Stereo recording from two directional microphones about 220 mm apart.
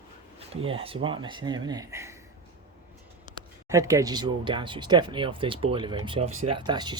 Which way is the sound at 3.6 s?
15° right (ahead or behind).